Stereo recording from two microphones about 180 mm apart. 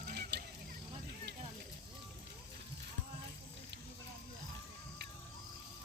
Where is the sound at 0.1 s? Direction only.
65° right (ahead or behind).